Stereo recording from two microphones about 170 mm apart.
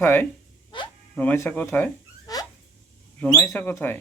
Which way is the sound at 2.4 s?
20° left (ahead or behind).